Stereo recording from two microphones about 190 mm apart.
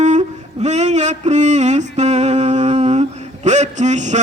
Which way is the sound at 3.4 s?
40° right (ahead or behind).